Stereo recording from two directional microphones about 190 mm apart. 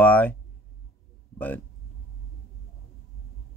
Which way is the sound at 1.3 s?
10° left (ahead or behind).